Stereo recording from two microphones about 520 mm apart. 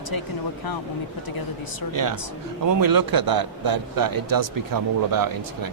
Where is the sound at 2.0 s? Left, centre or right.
Right.